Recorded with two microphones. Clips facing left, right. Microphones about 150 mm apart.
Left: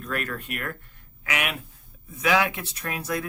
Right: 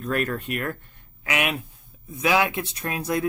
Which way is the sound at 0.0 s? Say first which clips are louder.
Right 5 dB; 30° right (ahead or behind).